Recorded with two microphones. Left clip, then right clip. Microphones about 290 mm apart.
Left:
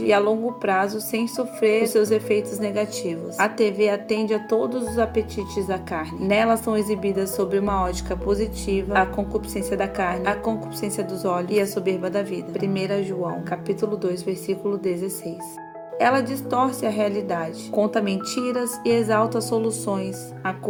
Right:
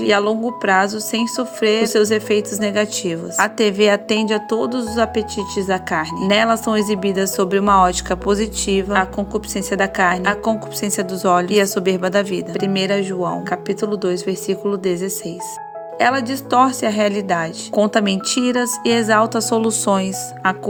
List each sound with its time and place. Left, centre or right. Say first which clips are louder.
0.0 s speech: right 3 dB; right